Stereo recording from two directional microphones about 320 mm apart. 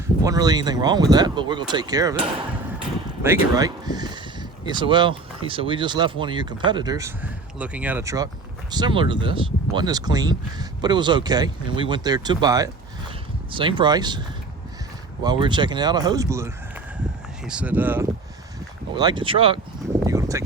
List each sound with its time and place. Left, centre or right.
0.3 s speech: centre
3.2 s speech: centre
20.1 s a sound: centre